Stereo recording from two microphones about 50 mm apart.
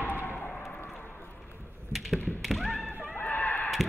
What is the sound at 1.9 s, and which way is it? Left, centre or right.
Tap, centre.